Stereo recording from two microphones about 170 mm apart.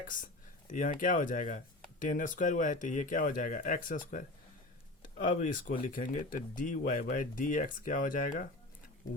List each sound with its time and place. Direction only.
0.0 s speech: 50° left (ahead or behind)